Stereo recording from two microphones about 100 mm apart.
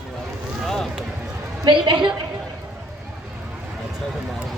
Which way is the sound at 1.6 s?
55° right (ahead or behind).